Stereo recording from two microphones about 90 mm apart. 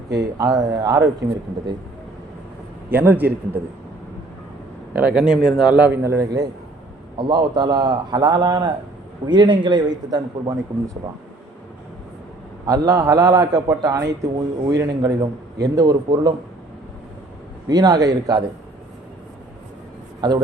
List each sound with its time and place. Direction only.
0.1 s a man's voice: 40° right (ahead or behind)
2.9 s a man's voice: 20° right (ahead or behind)
4.9 s speech: 10° right (ahead or behind)
5.7 s speech: 15° right (ahead or behind)
6.0 s a man's voice: 35° right (ahead or behind)
7.2 s a man's voice: 60° right (ahead or behind)
12.6 s a man's voice: 45° right (ahead or behind)
17.7 s a man's voice: 50° right (ahead or behind)
20.2 s a man's voice: 50° right (ahead or behind)